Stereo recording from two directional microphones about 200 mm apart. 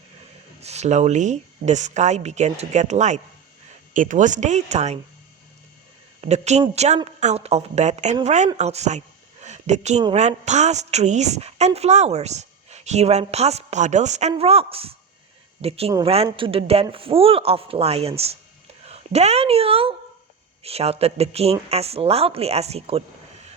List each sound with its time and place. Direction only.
0.6 s a woman's voice: 35° right (ahead or behind)
6.2 s a woman's voice: 35° right (ahead or behind)